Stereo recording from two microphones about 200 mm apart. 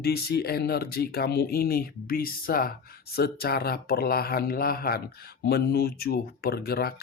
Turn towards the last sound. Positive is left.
turn(degrees=50)  # may be behind; listen again after turning